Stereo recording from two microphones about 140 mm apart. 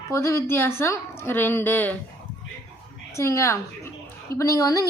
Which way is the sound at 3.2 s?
20° left (ahead or behind).